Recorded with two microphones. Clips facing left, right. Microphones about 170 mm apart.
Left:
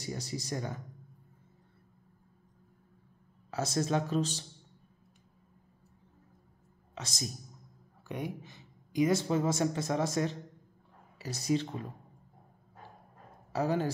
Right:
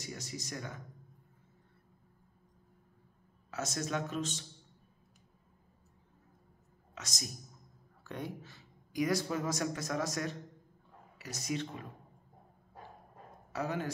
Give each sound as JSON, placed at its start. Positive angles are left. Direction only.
{"t": 0.0, "sound": "a man's voice", "side_deg": 30}
{"t": 3.4, "sound": "a man's voice", "side_deg": 30}
{"t": 7.0, "sound": "speech", "side_deg": 30}
{"t": 8.0, "sound": "speech", "side_deg": 15}
{"t": 13.5, "sound": "a man's voice", "side_deg": 30}